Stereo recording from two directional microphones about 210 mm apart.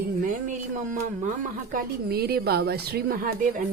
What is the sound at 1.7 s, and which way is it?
Speech, 45° right (ahead or behind).